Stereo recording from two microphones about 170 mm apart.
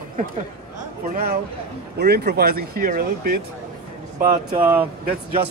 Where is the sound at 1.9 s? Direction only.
70° right (ahead or behind).